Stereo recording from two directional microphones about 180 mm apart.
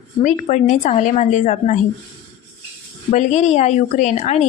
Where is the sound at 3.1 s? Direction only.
40° left (ahead or behind).